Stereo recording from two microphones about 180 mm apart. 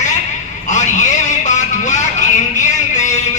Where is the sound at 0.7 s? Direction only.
40° left (ahead or behind).